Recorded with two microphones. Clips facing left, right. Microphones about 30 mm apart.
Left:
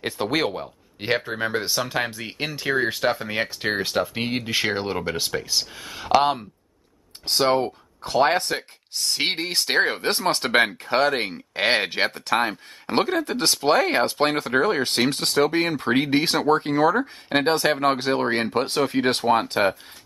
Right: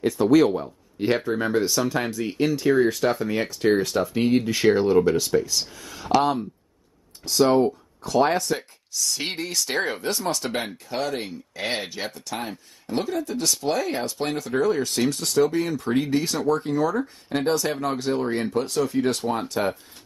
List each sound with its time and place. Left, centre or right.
0.0 s speech: left
7.2 s speech: left